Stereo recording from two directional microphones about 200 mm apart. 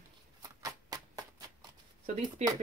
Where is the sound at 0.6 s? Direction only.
20° right (ahead or behind).